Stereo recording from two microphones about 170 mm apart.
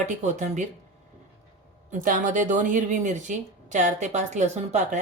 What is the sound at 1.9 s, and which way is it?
Speech, 50° right (ahead or behind).